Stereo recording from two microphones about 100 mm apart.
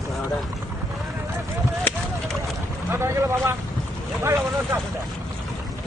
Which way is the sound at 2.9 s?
25° right (ahead or behind).